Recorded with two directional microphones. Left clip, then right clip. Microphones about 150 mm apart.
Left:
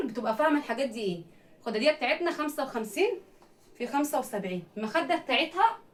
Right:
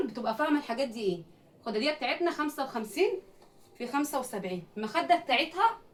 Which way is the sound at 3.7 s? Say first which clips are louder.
Left 3 dB; 15° left (ahead or behind).